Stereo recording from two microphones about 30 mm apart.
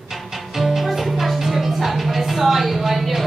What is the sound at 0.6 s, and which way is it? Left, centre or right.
Music, centre.